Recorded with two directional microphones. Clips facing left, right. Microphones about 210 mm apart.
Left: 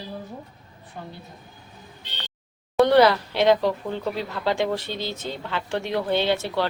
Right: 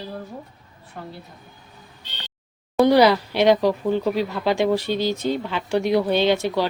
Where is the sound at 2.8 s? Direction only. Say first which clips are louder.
Right 2 dB; 10° right (ahead or behind).